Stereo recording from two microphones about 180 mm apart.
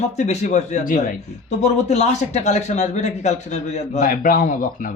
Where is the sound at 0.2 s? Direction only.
40° left (ahead or behind).